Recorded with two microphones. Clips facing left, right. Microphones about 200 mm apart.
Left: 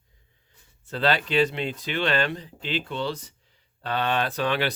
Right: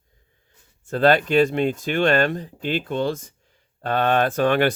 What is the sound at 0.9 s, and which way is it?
Speech, 50° right (ahead or behind).